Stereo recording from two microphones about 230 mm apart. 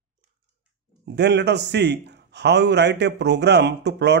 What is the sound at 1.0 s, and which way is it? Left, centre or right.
Speech, right.